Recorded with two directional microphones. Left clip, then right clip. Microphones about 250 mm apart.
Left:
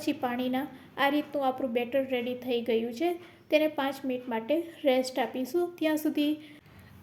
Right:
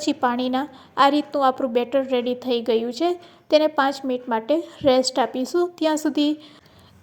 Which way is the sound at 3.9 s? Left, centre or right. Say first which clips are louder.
Right 9 dB; right.